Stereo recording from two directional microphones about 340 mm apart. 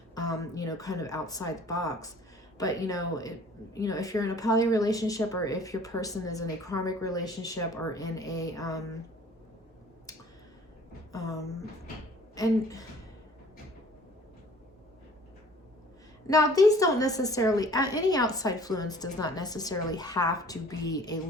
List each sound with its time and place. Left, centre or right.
0.1 s speech: centre
11.1 s speech: centre
16.2 s speech: centre